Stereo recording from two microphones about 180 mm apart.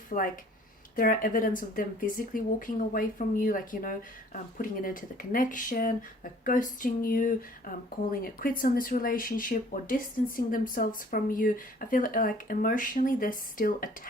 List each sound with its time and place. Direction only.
0.1 s speech: 50° left (ahead or behind)